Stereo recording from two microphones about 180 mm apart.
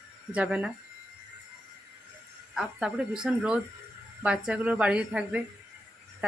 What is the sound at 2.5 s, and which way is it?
Speech, 5° right (ahead or behind).